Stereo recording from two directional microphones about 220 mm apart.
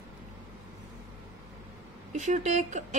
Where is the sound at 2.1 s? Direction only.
35° right (ahead or behind).